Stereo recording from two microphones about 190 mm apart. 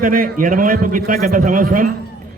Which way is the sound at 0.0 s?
45° right (ahead or behind).